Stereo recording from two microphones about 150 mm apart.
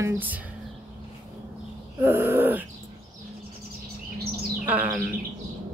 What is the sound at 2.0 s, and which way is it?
Speech, 15° right (ahead or behind).